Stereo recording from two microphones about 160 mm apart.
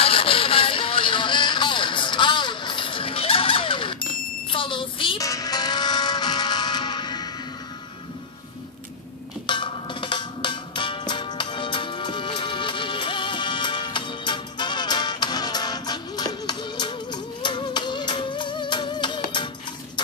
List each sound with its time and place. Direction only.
0.0 s music: 35° left (ahead or behind)
9.5 s music: 30° left (ahead or behind)